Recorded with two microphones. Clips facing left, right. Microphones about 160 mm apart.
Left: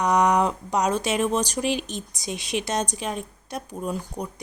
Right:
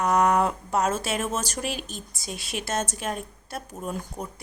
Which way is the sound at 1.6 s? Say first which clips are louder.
Left 6 dB; 45° right (ahead or behind).